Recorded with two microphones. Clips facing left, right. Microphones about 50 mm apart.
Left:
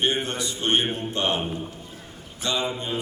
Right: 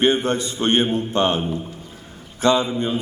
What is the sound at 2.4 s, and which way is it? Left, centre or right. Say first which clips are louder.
Speech: right 9 dB; right.